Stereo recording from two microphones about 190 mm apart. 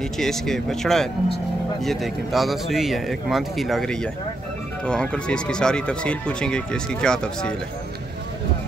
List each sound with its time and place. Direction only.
0.2 s speech: centre (ahead or behind)